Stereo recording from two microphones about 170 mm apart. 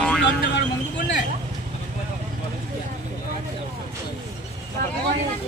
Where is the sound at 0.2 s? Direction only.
90° left.